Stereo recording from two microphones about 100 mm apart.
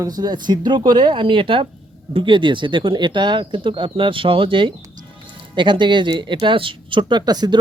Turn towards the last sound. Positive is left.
turn(degrees=-45)  # may be behind; listen again after turning